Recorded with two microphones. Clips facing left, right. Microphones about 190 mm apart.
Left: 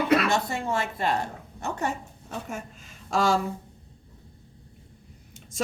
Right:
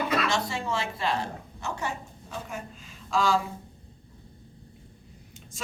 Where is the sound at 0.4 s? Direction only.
50° left (ahead or behind).